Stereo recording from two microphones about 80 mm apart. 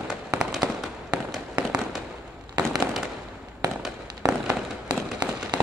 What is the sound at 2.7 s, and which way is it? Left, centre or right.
Fireworks, centre.